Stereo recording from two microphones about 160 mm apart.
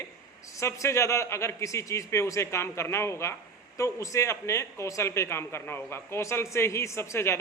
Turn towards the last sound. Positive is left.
turn(degrees=15)  # may be behind; listen again after turning